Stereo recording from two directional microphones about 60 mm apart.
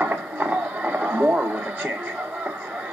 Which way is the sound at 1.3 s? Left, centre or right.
Right.